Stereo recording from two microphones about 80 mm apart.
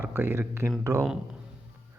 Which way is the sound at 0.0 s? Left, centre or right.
Right.